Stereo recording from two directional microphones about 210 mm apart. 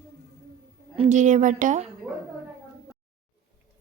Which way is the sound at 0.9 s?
30° right (ahead or behind).